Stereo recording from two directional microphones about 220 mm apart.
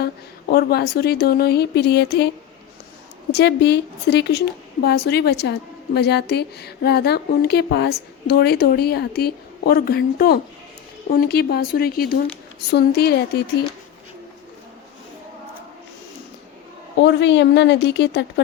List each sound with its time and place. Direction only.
0.0 s a woman's voice: 45° left (ahead or behind)
3.3 s a woman's voice: 50° left (ahead or behind)
17.0 s a woman's voice: 55° left (ahead or behind)